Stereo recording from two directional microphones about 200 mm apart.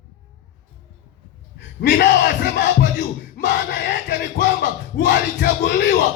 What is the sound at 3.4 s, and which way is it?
Music, 65° left (ahead or behind).